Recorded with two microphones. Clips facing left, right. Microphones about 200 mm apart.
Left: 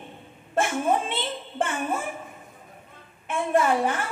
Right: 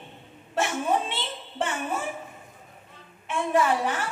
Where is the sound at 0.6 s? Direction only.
50° left (ahead or behind).